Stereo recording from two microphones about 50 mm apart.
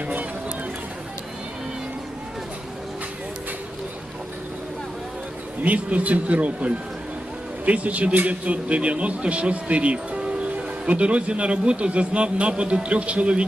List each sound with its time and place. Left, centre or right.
5.6 s a man's voice: right